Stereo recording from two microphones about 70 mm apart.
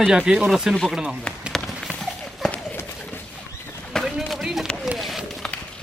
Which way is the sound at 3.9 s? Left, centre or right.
Centre.